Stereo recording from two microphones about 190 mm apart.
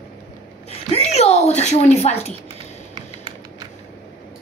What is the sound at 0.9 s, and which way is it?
Speech, 35° left (ahead or behind).